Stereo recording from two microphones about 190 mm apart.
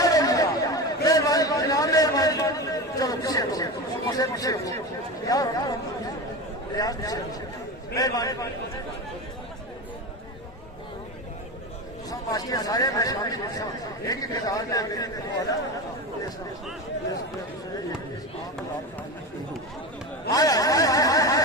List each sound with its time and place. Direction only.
0.0 s chatter: 20° left (ahead or behind)
1.0 s a sound: 20° left (ahead or behind)
4.1 s speech: 20° left (ahead or behind)
6.7 s speech: 20° left (ahead or behind)
12.3 s speech: 20° left (ahead or behind)
20.3 s a sound: 20° left (ahead or behind)